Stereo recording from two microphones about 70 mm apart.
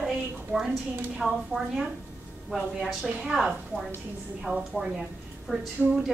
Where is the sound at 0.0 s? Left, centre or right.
Centre.